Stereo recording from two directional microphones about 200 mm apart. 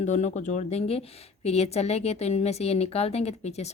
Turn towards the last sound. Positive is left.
turn(degrees=30)  # may be behind; listen again after turning